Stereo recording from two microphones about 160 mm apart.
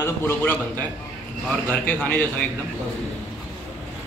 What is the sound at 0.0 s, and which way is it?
Speech, 15° left (ahead or behind).